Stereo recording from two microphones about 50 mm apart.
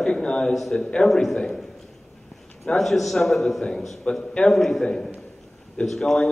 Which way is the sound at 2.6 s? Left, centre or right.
Centre.